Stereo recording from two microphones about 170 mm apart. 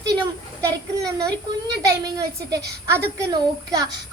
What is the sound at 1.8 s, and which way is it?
Speech, 20° right (ahead or behind).